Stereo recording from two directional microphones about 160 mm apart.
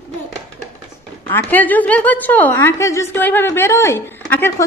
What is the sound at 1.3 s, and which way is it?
A woman's voice, 10° left (ahead or behind).